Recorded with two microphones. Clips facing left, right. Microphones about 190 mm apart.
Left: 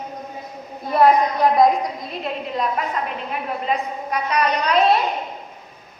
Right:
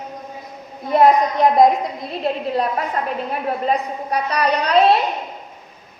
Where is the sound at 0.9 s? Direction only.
25° right (ahead or behind).